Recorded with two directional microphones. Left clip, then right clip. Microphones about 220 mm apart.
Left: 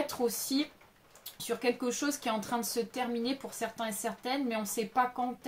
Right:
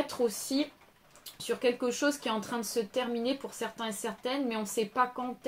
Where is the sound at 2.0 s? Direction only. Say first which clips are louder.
Right 3 dB; 20° left (ahead or behind).